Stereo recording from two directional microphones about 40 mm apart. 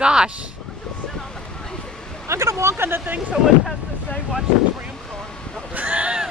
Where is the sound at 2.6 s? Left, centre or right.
Right.